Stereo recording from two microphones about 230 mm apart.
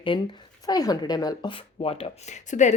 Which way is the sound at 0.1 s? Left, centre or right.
Left.